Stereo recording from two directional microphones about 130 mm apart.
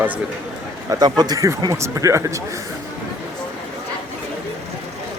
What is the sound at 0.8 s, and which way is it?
A man's voice, 30° right (ahead or behind).